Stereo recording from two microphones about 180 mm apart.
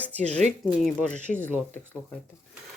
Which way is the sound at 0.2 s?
40° right (ahead or behind).